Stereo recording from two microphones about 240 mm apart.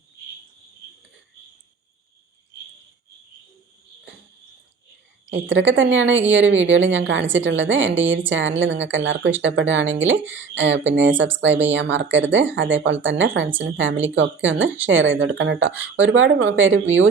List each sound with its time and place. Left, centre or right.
5.3 s a woman's voice: right